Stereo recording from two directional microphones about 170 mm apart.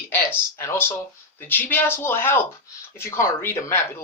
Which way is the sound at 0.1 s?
15° left (ahead or behind).